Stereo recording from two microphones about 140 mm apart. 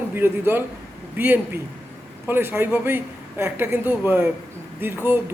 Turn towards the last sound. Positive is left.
turn(degrees=-15)  # may be behind; listen again after turning